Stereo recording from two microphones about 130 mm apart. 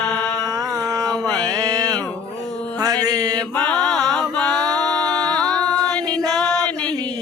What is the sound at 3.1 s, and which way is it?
Mantra, 30° right (ahead or behind).